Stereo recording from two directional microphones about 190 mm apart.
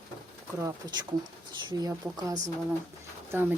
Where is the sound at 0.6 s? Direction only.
20° right (ahead or behind).